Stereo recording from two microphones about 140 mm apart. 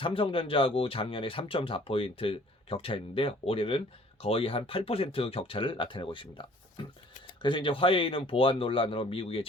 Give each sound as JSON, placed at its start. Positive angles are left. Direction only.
{"t": 0.0, "sound": "speech", "side_deg": 40}